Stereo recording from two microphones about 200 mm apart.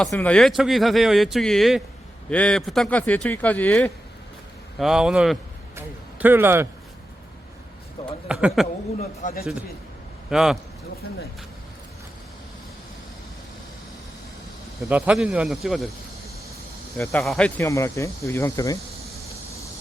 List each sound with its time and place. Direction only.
0.0 s speech: 5° left (ahead or behind); by 6.7 s 10° right (ahead or behind)
8.3 s speech: 5° right (ahead or behind)
9.2 s a man's voice: 50° left (ahead or behind)
10.2 s speech: centre (ahead or behind)
14.8 s speech: 5° right (ahead or behind)
17.0 s speech: 5° left (ahead or behind)